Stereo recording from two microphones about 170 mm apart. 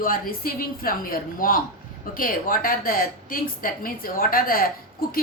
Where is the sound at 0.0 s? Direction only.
55° left (ahead or behind).